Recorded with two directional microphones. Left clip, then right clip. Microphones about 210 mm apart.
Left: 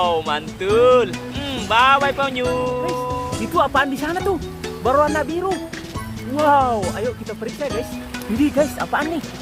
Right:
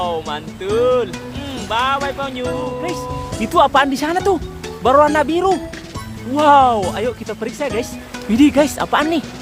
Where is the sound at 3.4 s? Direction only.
20° right (ahead or behind).